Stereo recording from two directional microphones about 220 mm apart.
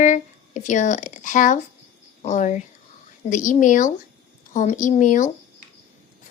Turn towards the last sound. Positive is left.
turn(degrees=35)  # may be behind; listen again after turning